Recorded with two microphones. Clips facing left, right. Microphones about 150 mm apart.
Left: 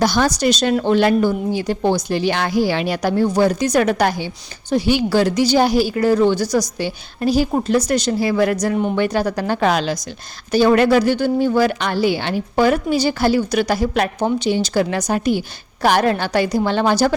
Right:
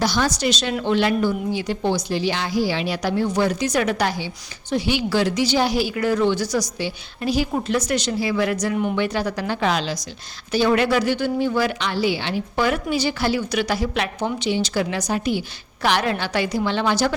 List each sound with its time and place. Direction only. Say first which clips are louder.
0.0 s a woman's voice: left 5 dB; 50° left (ahead or behind)